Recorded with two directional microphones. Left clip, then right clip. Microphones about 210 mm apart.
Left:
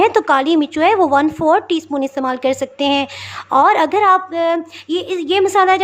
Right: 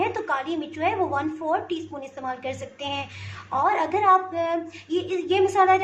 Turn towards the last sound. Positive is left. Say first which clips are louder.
# left 6 dB
turn(degrees=45)  # may be behind; listen again after turning